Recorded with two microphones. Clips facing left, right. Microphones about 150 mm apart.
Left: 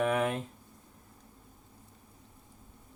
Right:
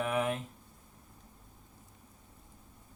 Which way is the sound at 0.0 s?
75° left (ahead or behind).